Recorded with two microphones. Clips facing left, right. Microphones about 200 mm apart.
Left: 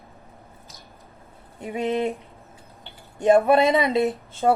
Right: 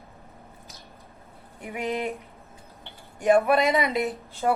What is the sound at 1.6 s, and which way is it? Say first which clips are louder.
Speech: left 5 dB; 25° left (ahead or behind).